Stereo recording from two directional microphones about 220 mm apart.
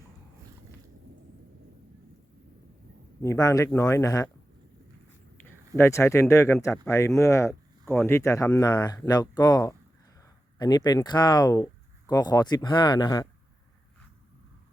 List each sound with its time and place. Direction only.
3.2 s speech: 15° left (ahead or behind)
5.4 s speech: 10° left (ahead or behind)